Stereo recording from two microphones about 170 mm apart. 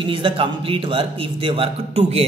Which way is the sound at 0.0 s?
30° right (ahead or behind).